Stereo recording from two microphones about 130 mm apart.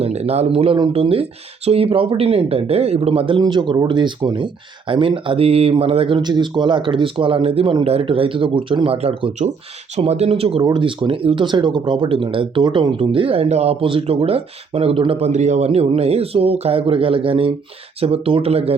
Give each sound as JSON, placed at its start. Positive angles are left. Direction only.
{"t": 0.0, "sound": "speech", "side_deg": -55}
{"t": 9.0, "sound": "speech", "side_deg": -55}
{"t": 15.3, "sound": "speech", "side_deg": -65}